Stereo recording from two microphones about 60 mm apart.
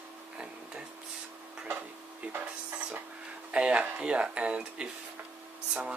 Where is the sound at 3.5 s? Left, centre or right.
Centre.